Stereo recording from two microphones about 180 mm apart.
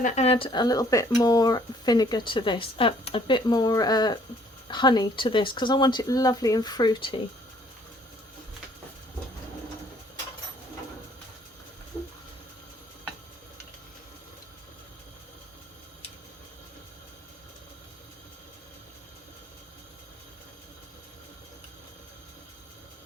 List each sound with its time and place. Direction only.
0.0 s speech: 40° left (ahead or behind)